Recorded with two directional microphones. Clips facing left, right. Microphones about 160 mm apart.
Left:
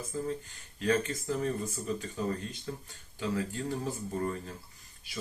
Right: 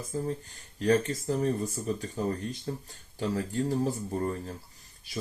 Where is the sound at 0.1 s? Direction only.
45° right (ahead or behind).